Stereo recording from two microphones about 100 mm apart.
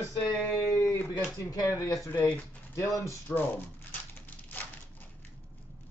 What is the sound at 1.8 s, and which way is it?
Speech, 30° left (ahead or behind).